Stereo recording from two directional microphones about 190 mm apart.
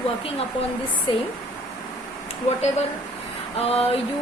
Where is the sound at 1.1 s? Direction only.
30° left (ahead or behind).